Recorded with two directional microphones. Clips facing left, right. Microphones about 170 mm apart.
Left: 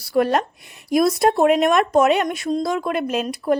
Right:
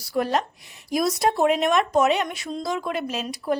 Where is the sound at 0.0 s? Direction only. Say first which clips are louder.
Left 5 dB; 65° left (ahead or behind).